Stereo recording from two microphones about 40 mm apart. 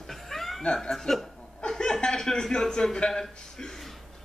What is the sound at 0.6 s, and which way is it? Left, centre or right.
Speech, left.